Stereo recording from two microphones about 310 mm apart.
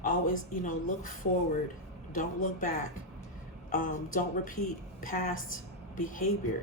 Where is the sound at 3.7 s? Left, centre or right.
Left.